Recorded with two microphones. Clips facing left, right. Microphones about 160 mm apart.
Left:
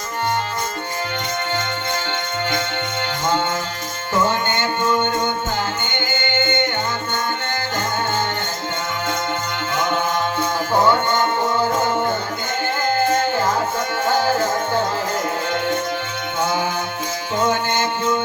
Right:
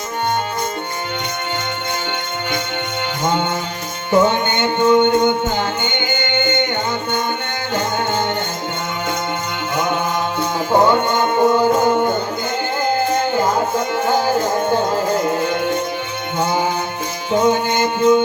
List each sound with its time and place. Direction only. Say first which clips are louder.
4.1 s music: right 5 dB; 20° right (ahead or behind)
10.7 s music: right 3 dB; 20° right (ahead or behind)
13.3 s music: right 3 dB; 15° right (ahead or behind)